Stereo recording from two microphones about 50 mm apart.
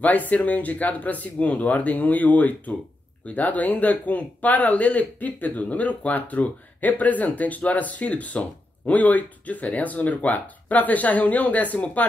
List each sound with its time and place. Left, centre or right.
0.0 s speech: left